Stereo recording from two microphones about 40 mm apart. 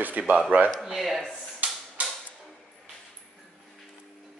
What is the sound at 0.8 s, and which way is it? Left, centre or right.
Speech, centre.